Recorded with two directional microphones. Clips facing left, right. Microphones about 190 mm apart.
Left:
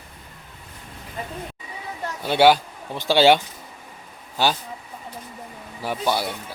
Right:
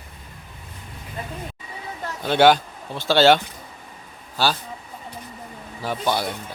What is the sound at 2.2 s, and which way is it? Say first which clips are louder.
Speech: even; 10° left (ahead or behind).